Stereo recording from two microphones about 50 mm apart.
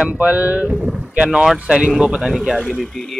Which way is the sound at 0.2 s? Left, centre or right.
Right.